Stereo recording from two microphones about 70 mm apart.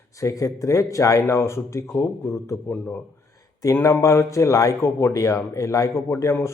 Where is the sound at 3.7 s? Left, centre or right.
Left.